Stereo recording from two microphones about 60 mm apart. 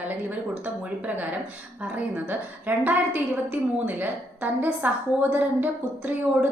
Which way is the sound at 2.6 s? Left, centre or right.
Right.